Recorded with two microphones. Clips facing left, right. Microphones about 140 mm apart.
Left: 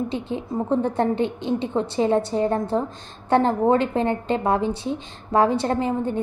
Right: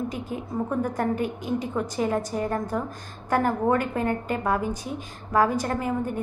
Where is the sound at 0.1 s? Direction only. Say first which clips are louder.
Left 4 dB; 25° left (ahead or behind).